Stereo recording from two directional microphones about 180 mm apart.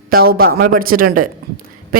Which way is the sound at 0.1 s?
55° right (ahead or behind).